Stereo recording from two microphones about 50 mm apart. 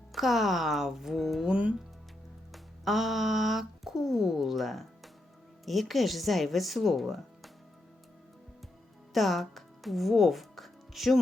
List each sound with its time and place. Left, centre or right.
0.1 s speech: centre
1.5 s speech: right
2.5 s speech: centre
9.1 s speech: centre